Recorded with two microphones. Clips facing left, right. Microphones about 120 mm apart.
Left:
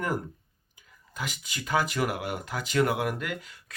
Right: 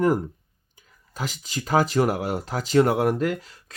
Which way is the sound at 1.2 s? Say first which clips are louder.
Right 5 dB; 35° right (ahead or behind).